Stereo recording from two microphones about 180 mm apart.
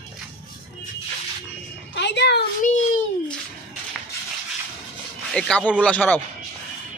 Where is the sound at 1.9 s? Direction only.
70° left (ahead or behind).